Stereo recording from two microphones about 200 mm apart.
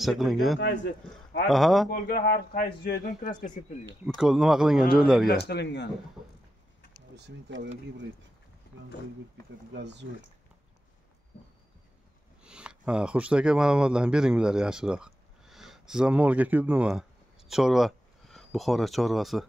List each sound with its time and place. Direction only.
0.0 s speech: centre (ahead or behind)
0.6 s a man's voice: 60° left (ahead or behind)
1.5 s speech: centre (ahead or behind)
1.9 s speech: 50° left (ahead or behind)
4.2 s speech: 5° right (ahead or behind)
5.5 s a man's voice: 60° left (ahead or behind)
7.2 s speech: 60° right (ahead or behind)
9.8 s speech: 60° right (ahead or behind)
12.4 s speech: 5° right (ahead or behind)